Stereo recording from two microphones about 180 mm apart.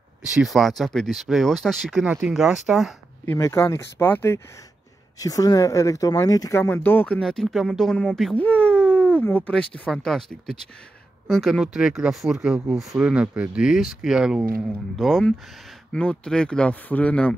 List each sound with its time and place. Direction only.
0.2 s speech: 5° right (ahead or behind)
3.3 s speech: 15° left (ahead or behind)